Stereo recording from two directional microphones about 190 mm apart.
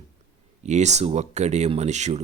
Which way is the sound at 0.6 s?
35° right (ahead or behind).